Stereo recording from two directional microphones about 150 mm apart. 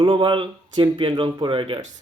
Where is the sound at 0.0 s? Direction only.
35° right (ahead or behind).